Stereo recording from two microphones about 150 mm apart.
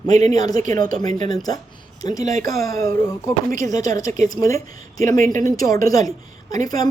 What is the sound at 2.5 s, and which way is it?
A woman's voice, 20° left (ahead or behind).